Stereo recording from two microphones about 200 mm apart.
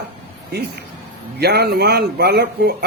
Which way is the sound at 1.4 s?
55° right (ahead or behind).